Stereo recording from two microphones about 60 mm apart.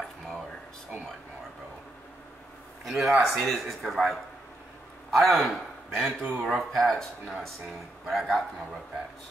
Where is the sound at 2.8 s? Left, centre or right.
Centre.